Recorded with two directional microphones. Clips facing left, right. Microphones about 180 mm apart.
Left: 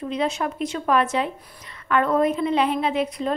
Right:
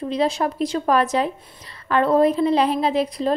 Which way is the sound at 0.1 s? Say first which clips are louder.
Right 4 dB; 35° right (ahead or behind).